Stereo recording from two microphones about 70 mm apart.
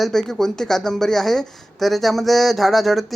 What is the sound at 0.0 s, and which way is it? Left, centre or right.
Speech, centre.